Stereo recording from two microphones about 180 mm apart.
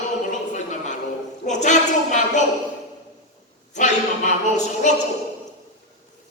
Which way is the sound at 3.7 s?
40° left (ahead or behind).